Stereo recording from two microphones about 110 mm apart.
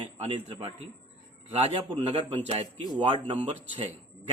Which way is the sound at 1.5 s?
75° right (ahead or behind).